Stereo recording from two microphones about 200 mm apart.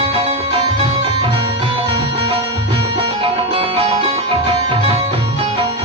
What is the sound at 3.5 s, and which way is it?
Music, 30° right (ahead or behind).